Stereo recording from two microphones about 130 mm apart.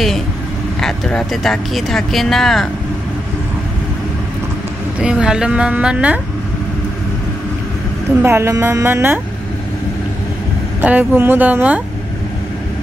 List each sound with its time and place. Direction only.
0.7 s speech: 5° left (ahead or behind)
5.0 s a woman's voice: 5° right (ahead or behind)
8.2 s a woman's voice: 20° right (ahead or behind)
10.8 s a woman's voice: 10° right (ahead or behind)